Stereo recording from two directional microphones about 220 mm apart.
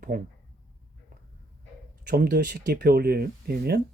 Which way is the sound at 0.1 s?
40° right (ahead or behind).